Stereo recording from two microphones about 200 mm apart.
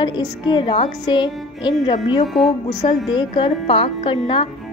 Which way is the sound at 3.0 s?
25° left (ahead or behind).